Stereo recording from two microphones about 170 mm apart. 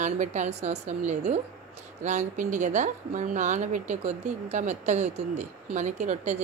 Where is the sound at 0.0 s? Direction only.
45° right (ahead or behind).